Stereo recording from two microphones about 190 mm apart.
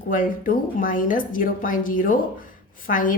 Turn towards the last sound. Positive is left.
turn(degrees=45)  # may be behind; listen again after turning